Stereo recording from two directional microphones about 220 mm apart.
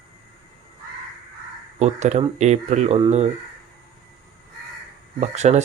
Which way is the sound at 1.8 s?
30° right (ahead or behind).